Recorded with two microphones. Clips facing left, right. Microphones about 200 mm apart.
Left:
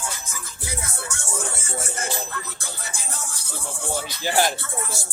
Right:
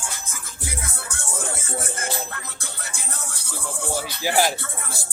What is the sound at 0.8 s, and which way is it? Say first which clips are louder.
Music: left 1 dB; 60° right (ahead or behind).